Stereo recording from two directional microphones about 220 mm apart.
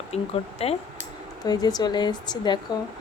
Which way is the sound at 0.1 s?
30° left (ahead or behind).